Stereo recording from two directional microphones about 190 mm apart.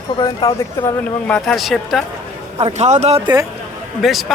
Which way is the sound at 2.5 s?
35° right (ahead or behind).